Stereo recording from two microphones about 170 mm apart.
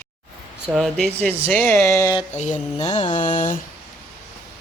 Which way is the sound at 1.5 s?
15° left (ahead or behind).